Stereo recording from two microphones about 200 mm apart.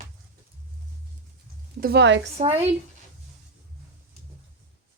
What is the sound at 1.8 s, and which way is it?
Speech, 55° right (ahead or behind).